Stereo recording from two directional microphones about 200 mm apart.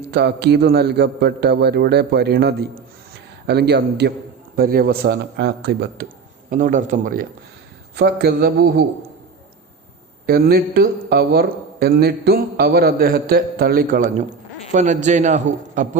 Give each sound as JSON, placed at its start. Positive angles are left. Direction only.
{"t": 0.1, "sound": "a man's voice", "side_deg": -55}
{"t": 6.5, "sound": "a man's voice", "side_deg": -40}
{"t": 10.2, "sound": "a man's voice", "side_deg": -50}